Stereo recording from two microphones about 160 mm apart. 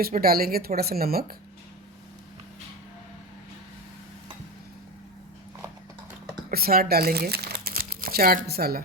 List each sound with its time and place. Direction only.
0.0 s a woman's voice: 70° right (ahead or behind)
6.5 s speech: 70° right (ahead or behind)